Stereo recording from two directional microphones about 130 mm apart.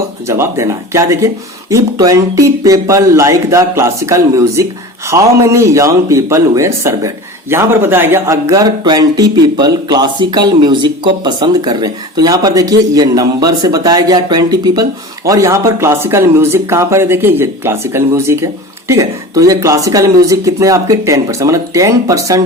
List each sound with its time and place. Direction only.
0.3 s speech: 20° right (ahead or behind)